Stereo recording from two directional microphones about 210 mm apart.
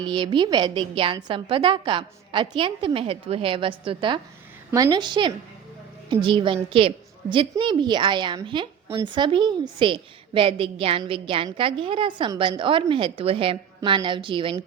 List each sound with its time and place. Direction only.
0.2 s a woman's voice: 20° right (ahead or behind)